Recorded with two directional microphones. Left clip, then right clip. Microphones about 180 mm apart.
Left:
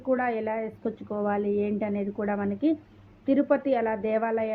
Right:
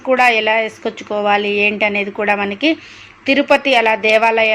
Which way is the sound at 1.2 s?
15° right (ahead or behind).